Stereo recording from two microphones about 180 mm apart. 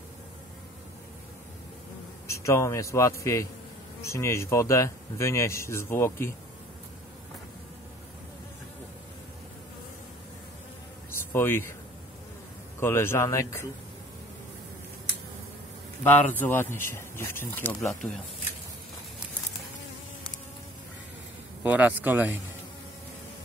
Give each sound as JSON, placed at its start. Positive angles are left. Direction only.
{"t": 2.2, "sound": "a man's voice", "side_deg": 15}
{"t": 11.1, "sound": "a sound", "side_deg": 10}
{"t": 12.8, "sound": "speech", "side_deg": 15}
{"t": 16.0, "sound": "speech", "side_deg": 10}
{"t": 21.6, "sound": "speech", "side_deg": -10}